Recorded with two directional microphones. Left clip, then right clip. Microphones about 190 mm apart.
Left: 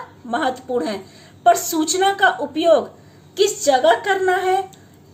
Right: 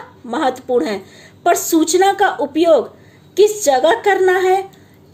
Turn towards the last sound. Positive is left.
turn(degrees=-40)  # may be behind; listen again after turning